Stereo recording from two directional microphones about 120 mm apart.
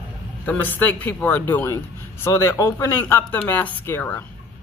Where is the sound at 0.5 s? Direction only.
15° left (ahead or behind).